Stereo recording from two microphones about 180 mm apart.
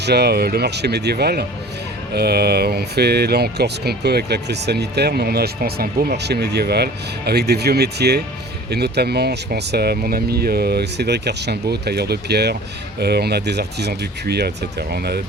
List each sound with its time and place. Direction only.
0.0 s speech: 65° right (ahead or behind)